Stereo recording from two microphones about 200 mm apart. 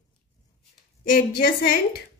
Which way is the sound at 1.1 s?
45° left (ahead or behind).